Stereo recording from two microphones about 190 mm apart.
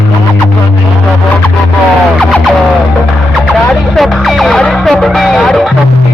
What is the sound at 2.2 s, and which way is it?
Music, centre (ahead or behind).